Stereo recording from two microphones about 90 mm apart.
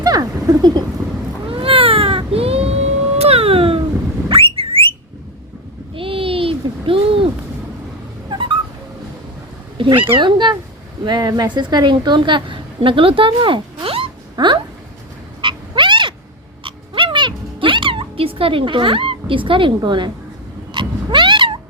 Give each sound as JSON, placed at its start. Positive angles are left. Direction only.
{"t": 0.0, "sound": "a sound", "side_deg": -45}
{"t": 1.5, "sound": "baby cry", "side_deg": -80}
{"t": 3.3, "sound": "a sound", "side_deg": -90}
{"t": 5.9, "sound": "a sound", "side_deg": -85}
{"t": 8.3, "sound": "dog", "side_deg": -65}
{"t": 9.7, "sound": "a woman's voice", "side_deg": -75}
{"t": 14.3, "sound": "dog", "side_deg": -65}
{"t": 15.4, "sound": "frog", "side_deg": -65}
{"t": 16.6, "sound": "music", "side_deg": -70}
{"t": 20.7, "sound": "cat", "side_deg": -65}